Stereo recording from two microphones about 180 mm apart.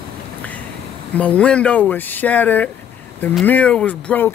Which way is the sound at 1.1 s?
5° left (ahead or behind).